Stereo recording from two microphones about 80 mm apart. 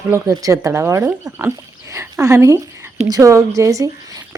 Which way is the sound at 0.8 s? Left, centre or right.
Right.